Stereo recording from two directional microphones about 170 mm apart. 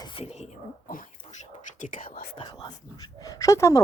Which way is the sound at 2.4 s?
25° left (ahead or behind).